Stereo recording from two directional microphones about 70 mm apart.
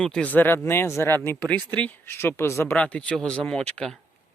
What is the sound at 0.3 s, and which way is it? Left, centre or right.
Speech, left.